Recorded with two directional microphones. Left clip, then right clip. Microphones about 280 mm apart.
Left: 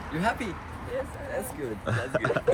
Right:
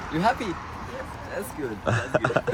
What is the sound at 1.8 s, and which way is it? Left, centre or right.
Speech, centre.